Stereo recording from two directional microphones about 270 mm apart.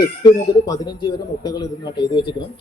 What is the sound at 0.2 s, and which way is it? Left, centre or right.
A man's voice, centre.